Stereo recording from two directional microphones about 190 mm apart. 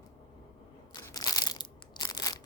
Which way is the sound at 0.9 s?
20° left (ahead or behind).